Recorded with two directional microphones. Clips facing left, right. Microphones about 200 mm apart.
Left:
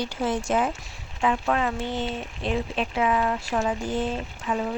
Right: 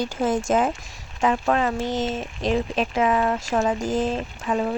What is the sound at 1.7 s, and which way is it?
Speech, 90° right.